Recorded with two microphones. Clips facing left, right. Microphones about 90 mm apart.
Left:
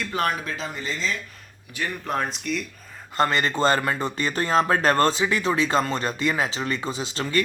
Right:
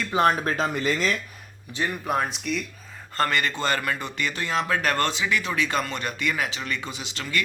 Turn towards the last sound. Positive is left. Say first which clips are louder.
# left 5 dB
turn(degrees=35)  # may be behind; listen again after turning